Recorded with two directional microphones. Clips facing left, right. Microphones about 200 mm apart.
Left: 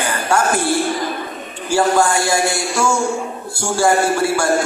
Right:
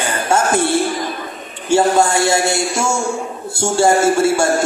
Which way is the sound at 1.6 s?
25° right (ahead or behind).